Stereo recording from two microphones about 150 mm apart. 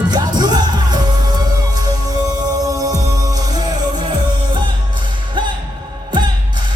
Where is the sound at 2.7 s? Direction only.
25° right (ahead or behind).